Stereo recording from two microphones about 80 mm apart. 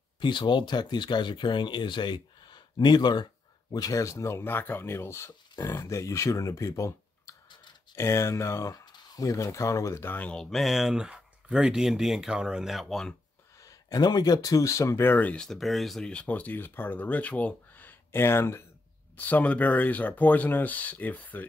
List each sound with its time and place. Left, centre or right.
0.2 s speech: left
3.7 s speech: left
10.1 s speech: centre
10.4 s speech: centre
13.6 s speech: left
15.0 s speech: left
15.4 s speech: centre
16.1 s speech: centre
18.1 s speech: left
19.1 s speech: left